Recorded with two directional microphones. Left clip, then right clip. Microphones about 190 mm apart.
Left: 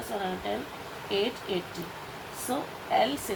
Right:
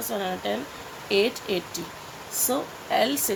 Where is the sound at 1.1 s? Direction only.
55° right (ahead or behind).